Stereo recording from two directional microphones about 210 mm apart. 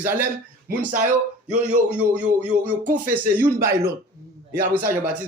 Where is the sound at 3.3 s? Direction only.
10° right (ahead or behind).